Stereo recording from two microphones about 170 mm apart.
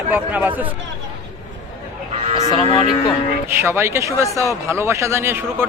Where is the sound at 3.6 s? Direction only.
15° right (ahead or behind).